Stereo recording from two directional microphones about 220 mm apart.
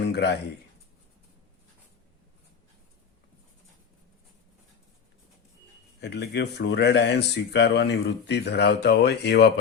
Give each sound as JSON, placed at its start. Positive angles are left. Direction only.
{"t": 0.1, "sound": "speech", "side_deg": 50}
{"t": 6.0, "sound": "speech", "side_deg": 50}